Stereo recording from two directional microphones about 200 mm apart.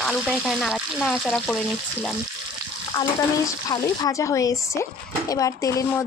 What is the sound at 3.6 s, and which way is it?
Speech, 20° left (ahead or behind).